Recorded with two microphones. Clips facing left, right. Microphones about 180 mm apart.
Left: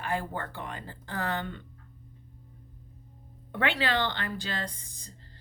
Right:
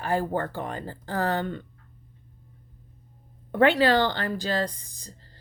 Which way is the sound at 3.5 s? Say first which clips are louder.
Right 9 dB; 40° right (ahead or behind).